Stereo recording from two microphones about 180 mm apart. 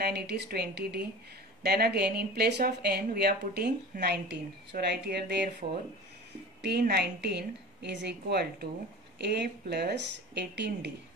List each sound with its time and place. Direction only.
0.0 s speech: 60° right (ahead or behind)